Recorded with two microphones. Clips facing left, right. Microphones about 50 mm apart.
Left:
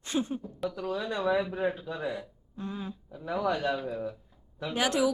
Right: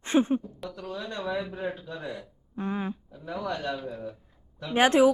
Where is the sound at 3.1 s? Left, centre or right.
Centre.